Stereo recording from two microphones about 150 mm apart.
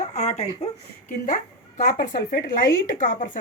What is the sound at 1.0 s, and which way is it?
Speech, 60° left (ahead or behind).